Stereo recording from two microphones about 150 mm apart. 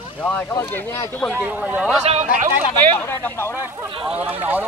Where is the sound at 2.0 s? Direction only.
45° right (ahead or behind).